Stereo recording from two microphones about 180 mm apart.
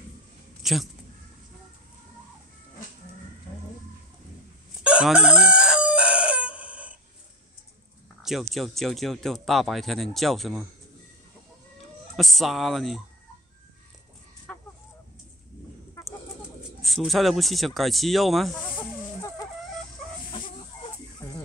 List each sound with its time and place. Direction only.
0.6 s a sound: centre (ahead or behind)
4.8 s chicken: 5° right (ahead or behind)
8.2 s speech: centre (ahead or behind)
12.2 s speech: centre (ahead or behind)
14.5 s fowl: 5° left (ahead or behind)
15.9 s bird: 15° left (ahead or behind)
16.8 s speech: centre (ahead or behind)
21.2 s music: 15° left (ahead or behind)